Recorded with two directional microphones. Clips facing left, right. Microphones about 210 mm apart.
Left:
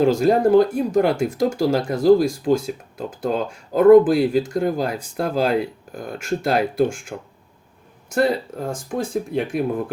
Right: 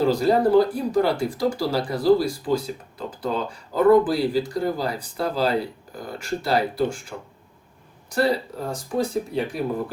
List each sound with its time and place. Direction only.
0.0 s speech: 50° left (ahead or behind)
8.1 s speech: 50° left (ahead or behind)